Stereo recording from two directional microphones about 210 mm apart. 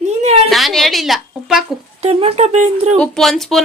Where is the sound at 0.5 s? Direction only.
Centre (ahead or behind).